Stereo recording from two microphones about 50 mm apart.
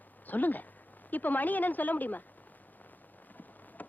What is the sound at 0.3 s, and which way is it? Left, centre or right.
A woman's voice, left.